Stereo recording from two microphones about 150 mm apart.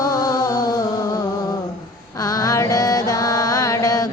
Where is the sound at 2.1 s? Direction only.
25° left (ahead or behind).